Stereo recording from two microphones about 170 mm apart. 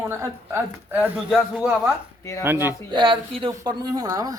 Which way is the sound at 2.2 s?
20° left (ahead or behind).